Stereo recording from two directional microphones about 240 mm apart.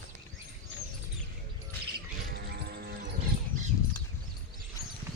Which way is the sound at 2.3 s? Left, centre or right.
Right.